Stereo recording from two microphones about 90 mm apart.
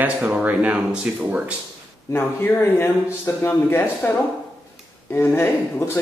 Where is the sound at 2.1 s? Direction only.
25° left (ahead or behind).